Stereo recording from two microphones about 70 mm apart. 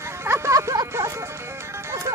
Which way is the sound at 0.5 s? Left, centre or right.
Right.